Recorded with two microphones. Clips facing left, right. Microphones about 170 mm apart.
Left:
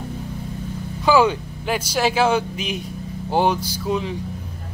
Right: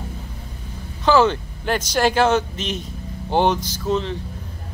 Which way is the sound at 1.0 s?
10° left (ahead or behind).